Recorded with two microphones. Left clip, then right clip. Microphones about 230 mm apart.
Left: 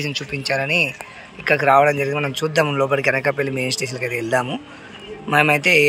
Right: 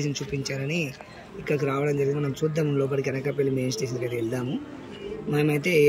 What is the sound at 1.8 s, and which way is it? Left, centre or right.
Speech, left.